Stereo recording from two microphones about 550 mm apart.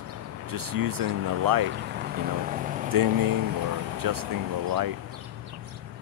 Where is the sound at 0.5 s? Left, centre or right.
Right.